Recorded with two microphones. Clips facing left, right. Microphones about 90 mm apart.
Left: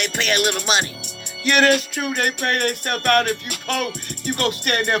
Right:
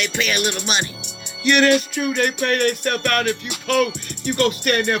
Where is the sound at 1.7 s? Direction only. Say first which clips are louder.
Right 2 dB; 50° left (ahead or behind).